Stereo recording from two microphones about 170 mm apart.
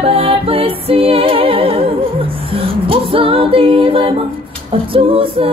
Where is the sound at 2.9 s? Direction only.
30° right (ahead or behind).